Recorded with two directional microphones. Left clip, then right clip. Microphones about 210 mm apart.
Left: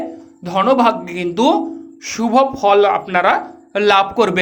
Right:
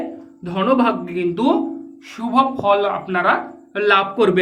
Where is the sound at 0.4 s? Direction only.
40° left (ahead or behind).